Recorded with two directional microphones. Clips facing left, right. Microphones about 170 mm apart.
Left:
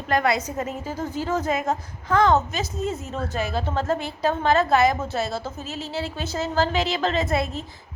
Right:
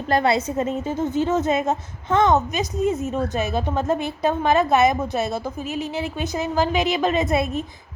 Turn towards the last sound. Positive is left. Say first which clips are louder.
# right 3 dB
turn(degrees=-15)  # may be behind; listen again after turning